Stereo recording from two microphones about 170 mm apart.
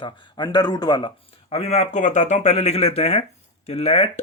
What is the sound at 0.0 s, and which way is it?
Speech, 25° left (ahead or behind).